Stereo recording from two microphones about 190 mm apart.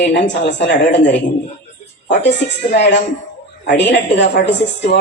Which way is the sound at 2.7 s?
65° left (ahead or behind).